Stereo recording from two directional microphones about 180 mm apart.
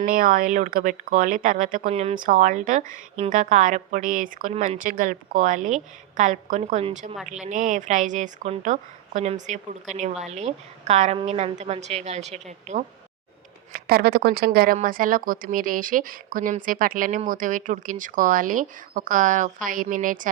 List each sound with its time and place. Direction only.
0.0 s speech: 50° right (ahead or behind)
2.1 s a woman's voice: 50° right (ahead or behind)
13.7 s speech: 60° right (ahead or behind)